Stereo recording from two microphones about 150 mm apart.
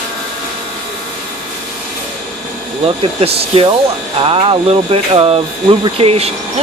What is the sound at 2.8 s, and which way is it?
Speech, 40° right (ahead or behind).